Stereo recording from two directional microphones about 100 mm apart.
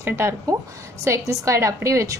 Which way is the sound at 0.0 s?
25° right (ahead or behind).